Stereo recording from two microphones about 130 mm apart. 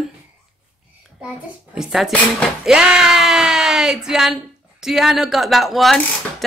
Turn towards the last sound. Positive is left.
turn(degrees=0)  # may be behind; listen again after turning